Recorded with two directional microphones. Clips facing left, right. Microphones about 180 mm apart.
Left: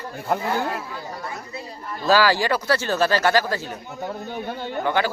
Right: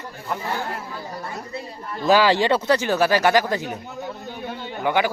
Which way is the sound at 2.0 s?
20° right (ahead or behind).